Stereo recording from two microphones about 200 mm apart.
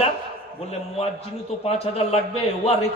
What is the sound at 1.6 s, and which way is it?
A man's voice, 30° left (ahead or behind).